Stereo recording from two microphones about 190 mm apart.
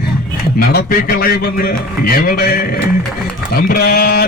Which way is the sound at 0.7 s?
50° left (ahead or behind).